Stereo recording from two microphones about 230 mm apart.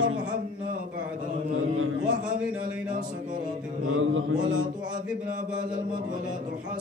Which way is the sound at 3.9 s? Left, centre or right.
Right.